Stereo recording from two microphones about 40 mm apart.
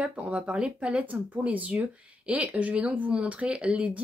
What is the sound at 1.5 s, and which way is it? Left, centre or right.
Speech, right.